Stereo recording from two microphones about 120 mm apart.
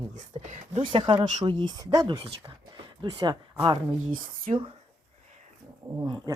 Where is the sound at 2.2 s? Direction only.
55° right (ahead or behind).